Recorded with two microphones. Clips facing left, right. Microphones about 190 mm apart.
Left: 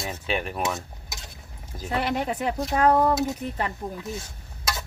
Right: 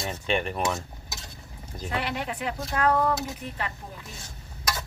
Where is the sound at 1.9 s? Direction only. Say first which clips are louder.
Left 5 dB; 40° left (ahead or behind).